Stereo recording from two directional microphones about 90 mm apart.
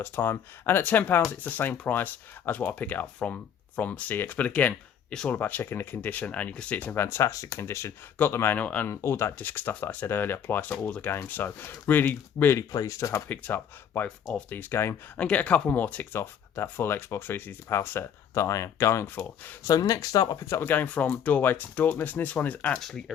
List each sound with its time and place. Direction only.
0.0 s speech: 25° left (ahead or behind); by 5.3 s 10° left (ahead or behind)
5.3 s speech: 20° left (ahead or behind)
8.9 s speech: 30° left (ahead or behind)
12.5 s speech: 35° left (ahead or behind)
13.2 s speech: 20° left (ahead or behind)
15.2 s speech: 15° left (ahead or behind); by 19.0 s 30° left (ahead or behind)
19.0 s speech: 20° left (ahead or behind)
19.6 s speech: 40° left (ahead or behind); by 22.8 s 15° left (ahead or behind)
22.8 s speech: centre (ahead or behind)